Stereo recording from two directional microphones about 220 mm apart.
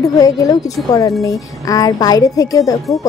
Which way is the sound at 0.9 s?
15° left (ahead or behind).